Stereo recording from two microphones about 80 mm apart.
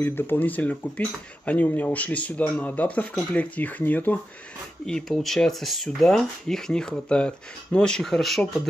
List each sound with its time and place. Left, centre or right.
0.0 s speech: left
4.8 s speech: centre